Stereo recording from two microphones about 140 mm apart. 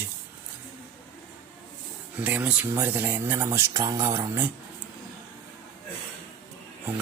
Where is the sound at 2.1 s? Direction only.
10° right (ahead or behind).